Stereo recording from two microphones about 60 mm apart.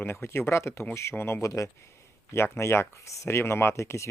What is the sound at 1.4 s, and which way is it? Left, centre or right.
Speech, left.